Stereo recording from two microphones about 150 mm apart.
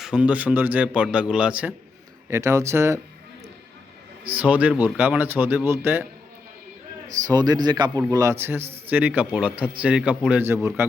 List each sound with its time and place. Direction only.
0.0 s speech: 5° right (ahead or behind)
2.3 s a man's voice: 20° right (ahead or behind)
4.4 s speech: 10° right (ahead or behind)
7.3 s a man's voice: 25° right (ahead or behind)